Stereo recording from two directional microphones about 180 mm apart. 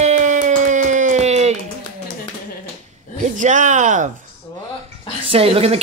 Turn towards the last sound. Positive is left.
turn(degrees=-35)  # may be behind; listen again after turning